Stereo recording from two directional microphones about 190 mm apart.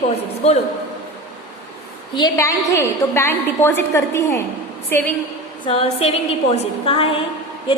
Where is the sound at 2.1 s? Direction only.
20° left (ahead or behind).